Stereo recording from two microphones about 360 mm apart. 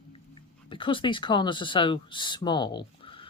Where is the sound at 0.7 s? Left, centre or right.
Centre.